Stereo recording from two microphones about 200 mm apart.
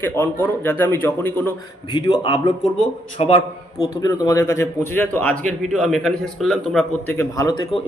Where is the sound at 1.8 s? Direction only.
25° left (ahead or behind).